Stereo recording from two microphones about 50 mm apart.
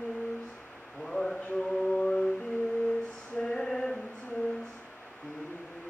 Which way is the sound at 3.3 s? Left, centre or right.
Centre.